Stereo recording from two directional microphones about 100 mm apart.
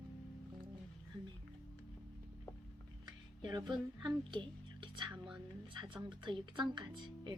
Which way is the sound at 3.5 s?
45° right (ahead or behind).